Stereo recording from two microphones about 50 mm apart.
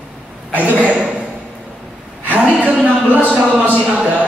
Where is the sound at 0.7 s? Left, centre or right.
Right.